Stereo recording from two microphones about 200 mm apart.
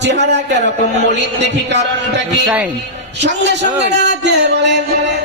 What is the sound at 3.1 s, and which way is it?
A man's voice, 60° right (ahead or behind).